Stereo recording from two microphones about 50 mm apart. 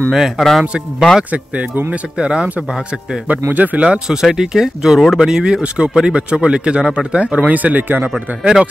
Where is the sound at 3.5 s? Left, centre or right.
Right.